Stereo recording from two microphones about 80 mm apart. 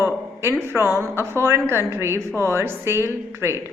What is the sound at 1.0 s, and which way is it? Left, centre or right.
Speech, left.